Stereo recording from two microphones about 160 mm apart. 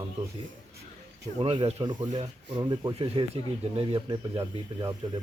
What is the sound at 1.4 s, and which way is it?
Speech, 35° right (ahead or behind).